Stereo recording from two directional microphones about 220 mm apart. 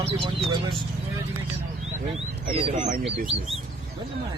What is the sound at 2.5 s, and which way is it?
Speech, 25° right (ahead or behind).